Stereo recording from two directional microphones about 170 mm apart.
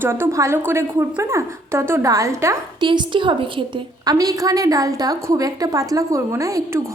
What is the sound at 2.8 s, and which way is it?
A woman's voice, 30° right (ahead or behind).